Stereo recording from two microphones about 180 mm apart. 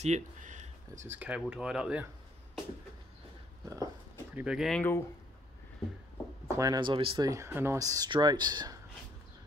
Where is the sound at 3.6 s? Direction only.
20° right (ahead or behind).